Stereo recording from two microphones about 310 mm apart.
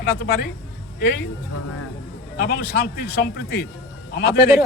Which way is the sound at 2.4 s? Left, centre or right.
Left.